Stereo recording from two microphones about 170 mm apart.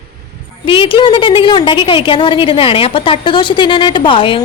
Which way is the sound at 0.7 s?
30° left (ahead or behind).